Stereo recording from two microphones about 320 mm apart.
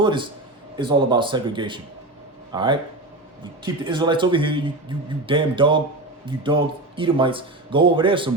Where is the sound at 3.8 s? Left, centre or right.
Centre.